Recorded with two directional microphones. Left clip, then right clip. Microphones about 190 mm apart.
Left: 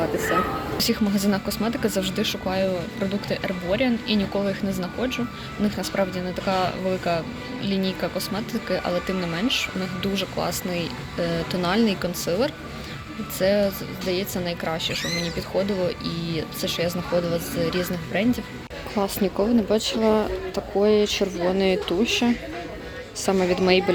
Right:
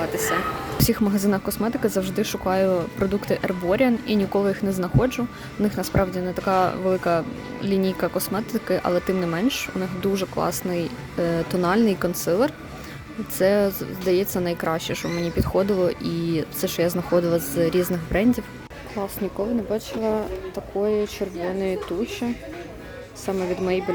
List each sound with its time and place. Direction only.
0.8 s speech: 50° right (ahead or behind)
18.9 s speech: 10° right (ahead or behind)